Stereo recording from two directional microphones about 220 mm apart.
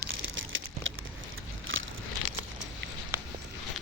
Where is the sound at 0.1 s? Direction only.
60° right (ahead or behind).